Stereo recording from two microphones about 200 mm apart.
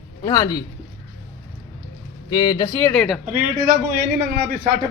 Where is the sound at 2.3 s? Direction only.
20° left (ahead or behind).